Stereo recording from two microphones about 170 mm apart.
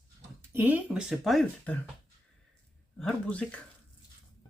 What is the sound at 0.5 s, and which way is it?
Speech, 10° right (ahead or behind).